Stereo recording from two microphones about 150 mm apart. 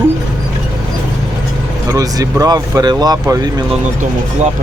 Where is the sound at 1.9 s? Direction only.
25° right (ahead or behind).